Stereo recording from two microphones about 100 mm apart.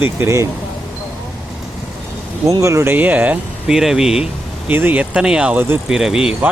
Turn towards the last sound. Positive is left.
turn(degrees=-5)  # may be behind; listen again after turning